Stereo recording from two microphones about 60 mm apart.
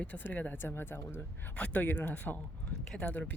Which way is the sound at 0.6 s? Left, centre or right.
Left.